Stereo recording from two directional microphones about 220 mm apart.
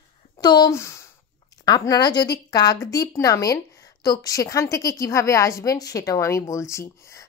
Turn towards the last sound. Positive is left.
turn(degrees=15)  # may be behind; listen again after turning